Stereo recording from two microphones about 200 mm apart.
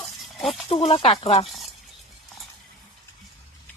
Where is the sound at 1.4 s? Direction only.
Centre (ahead or behind).